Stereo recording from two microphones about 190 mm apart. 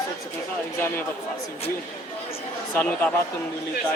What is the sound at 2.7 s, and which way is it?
Speech, 10° left (ahead or behind).